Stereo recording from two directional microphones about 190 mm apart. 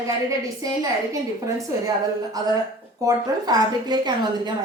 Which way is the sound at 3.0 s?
20° right (ahead or behind).